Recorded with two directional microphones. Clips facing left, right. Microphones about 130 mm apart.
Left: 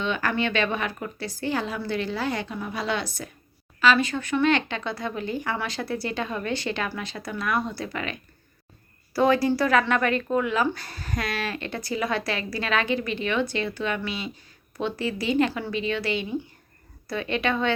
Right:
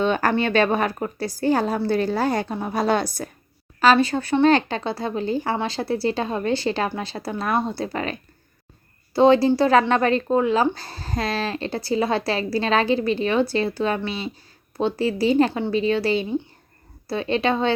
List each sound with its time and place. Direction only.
0.0 s speech: 40° right (ahead or behind)
9.1 s speech: 25° right (ahead or behind)